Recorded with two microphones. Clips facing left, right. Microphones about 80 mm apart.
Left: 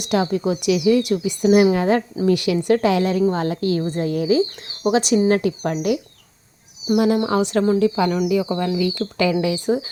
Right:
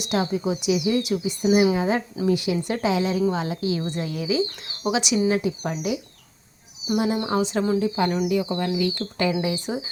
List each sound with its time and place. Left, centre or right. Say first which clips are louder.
0.0 s a woman's voice: left 4 dB; left
5.4 s speech: left 5 dB; left
6.9 s speech: left 6 dB; left
7.3 s speech: left 4 dB; left
7.8 s speech: left 4 dB; left